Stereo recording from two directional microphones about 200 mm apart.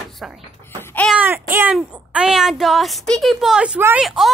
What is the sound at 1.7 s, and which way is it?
Speech, 5° right (ahead or behind).